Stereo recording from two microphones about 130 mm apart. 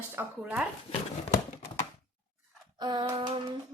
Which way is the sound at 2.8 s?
35° right (ahead or behind).